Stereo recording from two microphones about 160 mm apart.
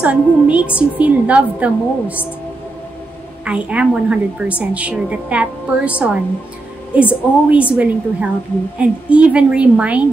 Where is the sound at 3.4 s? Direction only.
5° right (ahead or behind).